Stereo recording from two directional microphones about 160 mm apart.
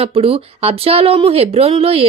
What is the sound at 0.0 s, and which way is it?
Speech, 35° right (ahead or behind).